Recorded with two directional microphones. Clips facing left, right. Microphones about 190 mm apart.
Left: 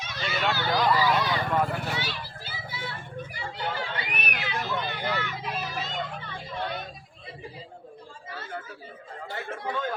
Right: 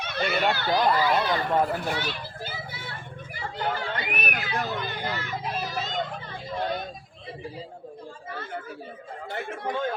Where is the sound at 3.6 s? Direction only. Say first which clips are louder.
Right 3 dB; 50° right (ahead or behind).